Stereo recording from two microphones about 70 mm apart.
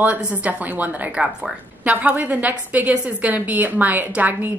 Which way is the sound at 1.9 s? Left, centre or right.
Right.